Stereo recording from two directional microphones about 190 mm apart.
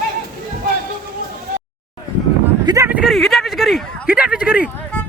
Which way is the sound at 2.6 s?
15° right (ahead or behind).